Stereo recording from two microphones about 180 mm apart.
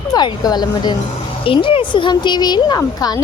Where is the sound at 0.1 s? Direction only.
20° left (ahead or behind).